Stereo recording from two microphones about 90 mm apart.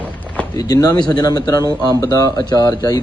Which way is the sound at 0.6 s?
45° left (ahead or behind).